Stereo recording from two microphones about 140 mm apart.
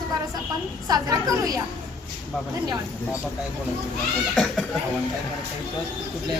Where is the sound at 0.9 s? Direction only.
25° right (ahead or behind).